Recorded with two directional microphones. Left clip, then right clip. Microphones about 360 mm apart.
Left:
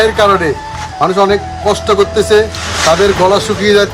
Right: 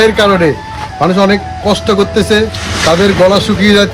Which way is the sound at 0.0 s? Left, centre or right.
Centre.